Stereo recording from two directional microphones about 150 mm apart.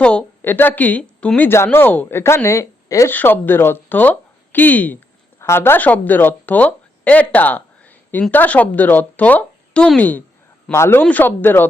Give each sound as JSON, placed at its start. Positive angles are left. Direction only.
{"t": 0.0, "sound": "speech", "side_deg": 10}